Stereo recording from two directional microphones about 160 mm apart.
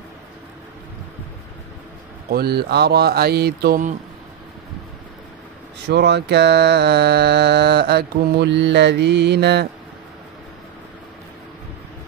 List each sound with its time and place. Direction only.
2.3 s mantra: 80° right
5.9 s mantra: 90° right